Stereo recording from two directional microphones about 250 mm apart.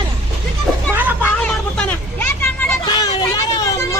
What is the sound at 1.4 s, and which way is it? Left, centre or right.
Vehicle, centre.